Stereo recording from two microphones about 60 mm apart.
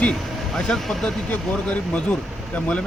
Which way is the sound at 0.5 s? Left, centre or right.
Centre.